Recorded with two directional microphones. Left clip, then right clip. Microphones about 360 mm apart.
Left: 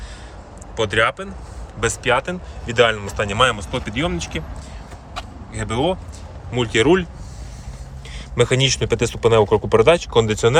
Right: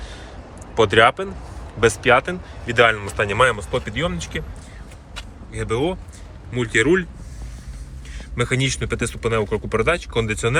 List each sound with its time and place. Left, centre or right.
0.8 s speech: centre
5.5 s speech: centre
8.4 s speech: centre
9.1 s speech: left
10.0 s speech: centre